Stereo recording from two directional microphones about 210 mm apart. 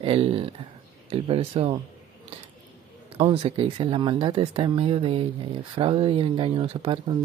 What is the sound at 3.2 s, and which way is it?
Speech, 30° right (ahead or behind).